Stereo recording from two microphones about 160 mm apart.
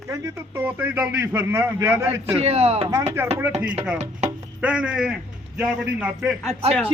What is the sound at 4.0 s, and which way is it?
Music, 45° right (ahead or behind).